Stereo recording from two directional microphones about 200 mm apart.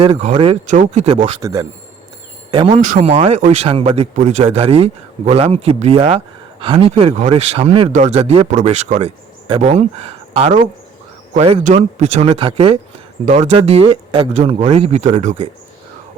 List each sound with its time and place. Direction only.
0.0 s speech: 30° right (ahead or behind); by 1.6 s 15° right (ahead or behind)
2.6 s speech: 35° right (ahead or behind)